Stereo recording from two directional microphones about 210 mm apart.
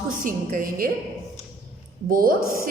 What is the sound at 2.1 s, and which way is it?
Speech, 45° right (ahead or behind).